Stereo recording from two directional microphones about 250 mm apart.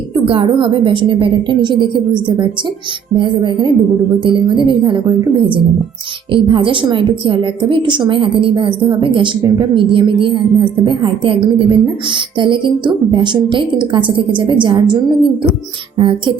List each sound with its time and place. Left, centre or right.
0.1 s a woman's voice: right